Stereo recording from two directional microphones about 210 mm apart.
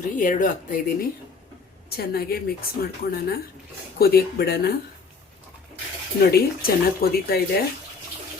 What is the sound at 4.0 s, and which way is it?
Speech, 45° left (ahead or behind).